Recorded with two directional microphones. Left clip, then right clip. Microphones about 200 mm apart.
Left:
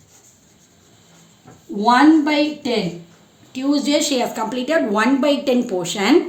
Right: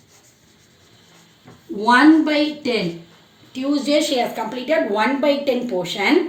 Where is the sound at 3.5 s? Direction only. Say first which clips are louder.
Left 1 dB; 50° left (ahead or behind).